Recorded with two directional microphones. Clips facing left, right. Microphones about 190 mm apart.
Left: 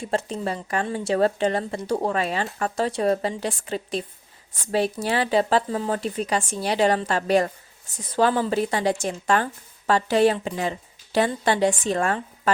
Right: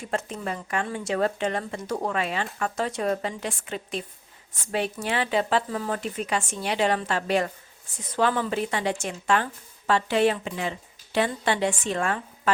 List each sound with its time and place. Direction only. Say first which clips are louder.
0.0 s a woman's voice: left 4 dB; 30° left (ahead or behind)